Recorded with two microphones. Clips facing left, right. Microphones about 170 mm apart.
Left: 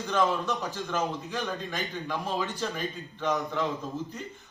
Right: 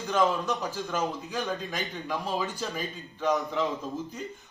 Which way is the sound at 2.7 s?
Centre (ahead or behind).